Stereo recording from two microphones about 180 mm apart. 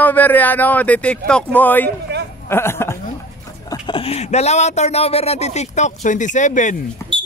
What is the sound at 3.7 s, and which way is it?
Speech, 30° left (ahead or behind).